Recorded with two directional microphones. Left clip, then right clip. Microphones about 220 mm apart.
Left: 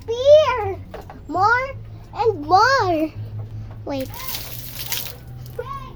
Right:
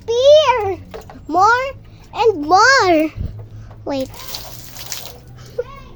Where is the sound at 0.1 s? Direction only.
45° right (ahead or behind); by 3.2 s 25° right (ahead or behind).